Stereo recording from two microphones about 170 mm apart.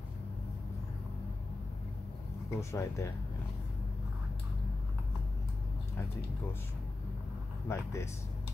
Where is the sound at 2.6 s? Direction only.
15° left (ahead or behind).